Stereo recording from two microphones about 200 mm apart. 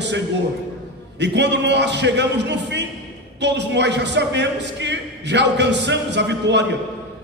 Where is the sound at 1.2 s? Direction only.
60° right (ahead or behind).